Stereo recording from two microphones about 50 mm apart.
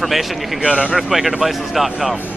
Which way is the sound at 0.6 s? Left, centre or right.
Centre.